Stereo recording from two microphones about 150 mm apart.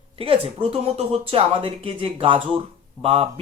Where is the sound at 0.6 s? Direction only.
40° right (ahead or behind).